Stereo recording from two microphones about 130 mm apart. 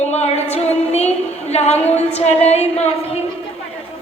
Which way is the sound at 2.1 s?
55° left (ahead or behind).